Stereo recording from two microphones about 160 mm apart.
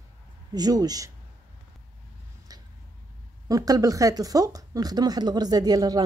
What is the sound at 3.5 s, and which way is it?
Speech, 20° right (ahead or behind).